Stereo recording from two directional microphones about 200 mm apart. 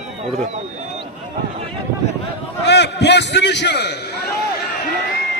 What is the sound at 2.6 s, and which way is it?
A man's voice, 60° left (ahead or behind).